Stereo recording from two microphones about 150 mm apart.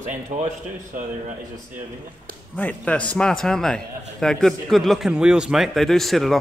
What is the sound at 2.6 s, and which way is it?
A man's voice, 10° left (ahead or behind).